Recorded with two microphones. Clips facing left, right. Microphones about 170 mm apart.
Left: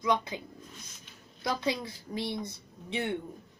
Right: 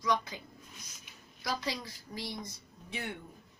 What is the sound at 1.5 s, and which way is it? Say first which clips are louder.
A woman's voice: left 5 dB; 25° left (ahead or behind).